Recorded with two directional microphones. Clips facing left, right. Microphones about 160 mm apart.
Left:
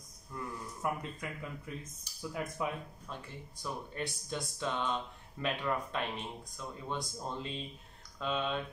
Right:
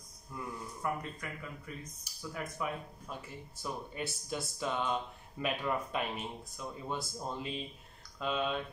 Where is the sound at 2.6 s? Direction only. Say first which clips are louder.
Left 1 dB; 20° left (ahead or behind).